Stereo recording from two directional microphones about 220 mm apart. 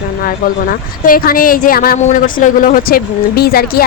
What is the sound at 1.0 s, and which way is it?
Speech, 40° left (ahead or behind).